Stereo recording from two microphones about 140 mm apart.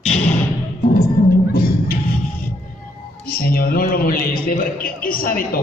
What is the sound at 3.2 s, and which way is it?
A man's voice, 90° left.